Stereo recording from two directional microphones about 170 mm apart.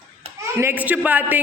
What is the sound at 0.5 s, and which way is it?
Speech, 10° right (ahead or behind).